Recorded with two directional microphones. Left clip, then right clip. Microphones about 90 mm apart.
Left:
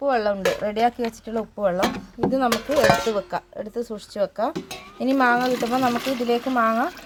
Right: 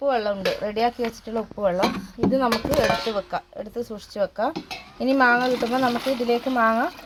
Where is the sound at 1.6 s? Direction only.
10° right (ahead or behind).